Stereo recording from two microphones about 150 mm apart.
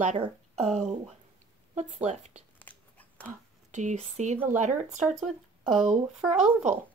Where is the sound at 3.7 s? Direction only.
50° right (ahead or behind).